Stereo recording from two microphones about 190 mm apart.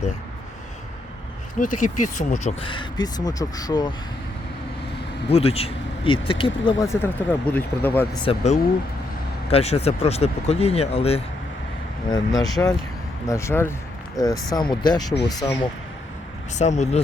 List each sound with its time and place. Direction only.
1.5 s speech: 45° left (ahead or behind); by 3.9 s 20° left (ahead or behind)
5.3 s speech: 30° left (ahead or behind); by 8.0 s 10° left (ahead or behind)
8.1 s speech: 30° left (ahead or behind)
12.1 s speech: 20° left (ahead or behind)
16.6 s speech: 35° left (ahead or behind)